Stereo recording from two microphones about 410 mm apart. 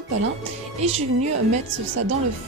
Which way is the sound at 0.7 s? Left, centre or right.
Centre.